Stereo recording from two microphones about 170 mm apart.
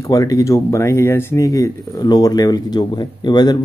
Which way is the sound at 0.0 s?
20° left (ahead or behind).